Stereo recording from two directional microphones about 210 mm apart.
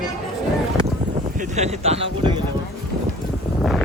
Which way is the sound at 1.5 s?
30° right (ahead or behind).